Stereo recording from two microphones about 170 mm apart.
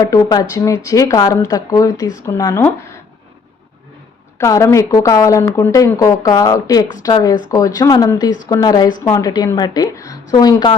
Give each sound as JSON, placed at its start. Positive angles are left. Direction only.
{"t": 0.0, "sound": "speech", "side_deg": 20}
{"t": 4.4, "sound": "speech", "side_deg": 15}